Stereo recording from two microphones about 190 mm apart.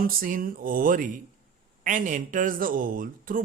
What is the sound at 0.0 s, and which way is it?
A man's voice, 45° right (ahead or behind).